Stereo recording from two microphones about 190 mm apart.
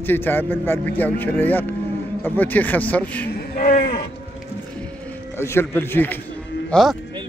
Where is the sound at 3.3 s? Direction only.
50° left (ahead or behind).